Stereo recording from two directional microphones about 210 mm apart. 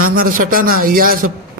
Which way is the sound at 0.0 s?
45° right (ahead or behind).